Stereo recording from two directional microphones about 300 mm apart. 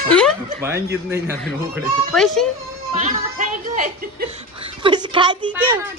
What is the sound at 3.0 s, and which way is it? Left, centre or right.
Music, right.